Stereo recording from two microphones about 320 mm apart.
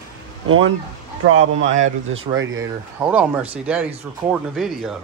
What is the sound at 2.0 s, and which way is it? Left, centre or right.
Speech, right.